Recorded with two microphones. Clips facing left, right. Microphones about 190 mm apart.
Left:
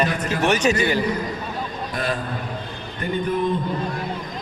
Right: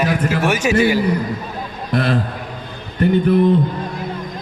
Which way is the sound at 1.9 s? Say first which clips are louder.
Right 8 dB; 70° right (ahead or behind).